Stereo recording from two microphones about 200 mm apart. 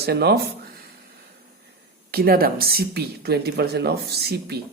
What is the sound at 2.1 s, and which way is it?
Speech, 50° right (ahead or behind).